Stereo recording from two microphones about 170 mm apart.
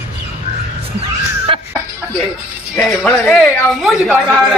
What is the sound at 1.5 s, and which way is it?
Music, 30° right (ahead or behind).